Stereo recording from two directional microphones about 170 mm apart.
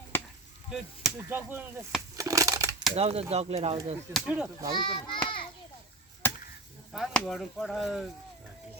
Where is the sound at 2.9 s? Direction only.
35° right (ahead or behind).